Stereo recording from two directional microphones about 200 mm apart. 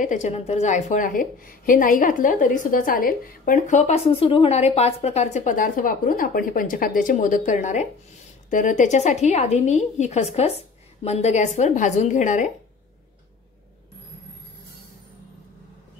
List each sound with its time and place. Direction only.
0.0 s a woman's voice: 35° left (ahead or behind)